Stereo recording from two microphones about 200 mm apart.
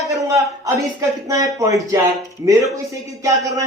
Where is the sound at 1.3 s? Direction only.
15° right (ahead or behind).